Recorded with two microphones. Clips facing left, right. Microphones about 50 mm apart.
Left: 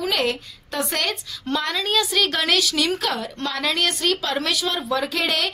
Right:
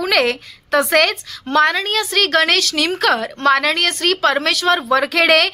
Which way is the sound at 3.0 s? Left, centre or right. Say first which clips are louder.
Right 10 dB; right.